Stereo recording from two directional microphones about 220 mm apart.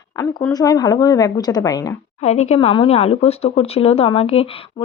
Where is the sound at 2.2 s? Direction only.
30° left (ahead or behind).